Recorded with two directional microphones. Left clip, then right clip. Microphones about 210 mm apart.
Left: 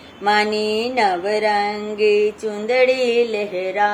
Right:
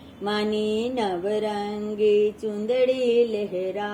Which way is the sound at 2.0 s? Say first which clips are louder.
Left 4 dB; 35° left (ahead or behind).